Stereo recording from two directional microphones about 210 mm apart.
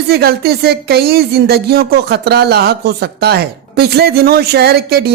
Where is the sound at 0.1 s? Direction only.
50° right (ahead or behind).